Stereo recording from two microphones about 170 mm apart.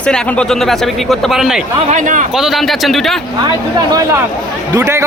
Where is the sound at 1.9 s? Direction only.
50° right (ahead or behind).